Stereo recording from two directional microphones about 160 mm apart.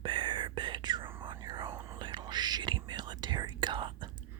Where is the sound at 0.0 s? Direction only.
30° right (ahead or behind).